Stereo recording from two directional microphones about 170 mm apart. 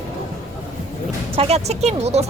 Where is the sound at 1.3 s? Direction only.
35° right (ahead or behind).